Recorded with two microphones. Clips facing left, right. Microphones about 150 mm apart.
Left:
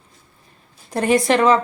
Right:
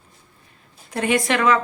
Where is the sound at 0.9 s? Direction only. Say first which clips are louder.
Left 4 dB; 35° left (ahead or behind).